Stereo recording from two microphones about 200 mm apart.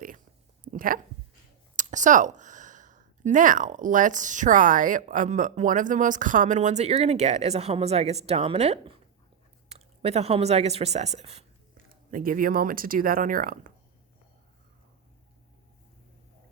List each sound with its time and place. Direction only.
0.6 s a sound: 45° right (ahead or behind)
1.7 s a woman's voice: 40° right (ahead or behind)
12.1 s speech: 45° right (ahead or behind)